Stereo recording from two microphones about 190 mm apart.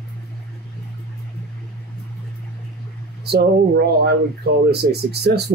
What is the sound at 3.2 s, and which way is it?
Speech, 60° right (ahead or behind).